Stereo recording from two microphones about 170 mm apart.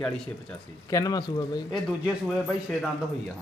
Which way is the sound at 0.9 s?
20° left (ahead or behind).